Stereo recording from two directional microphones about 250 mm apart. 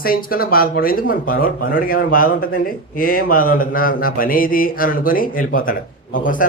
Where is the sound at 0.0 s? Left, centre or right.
Left.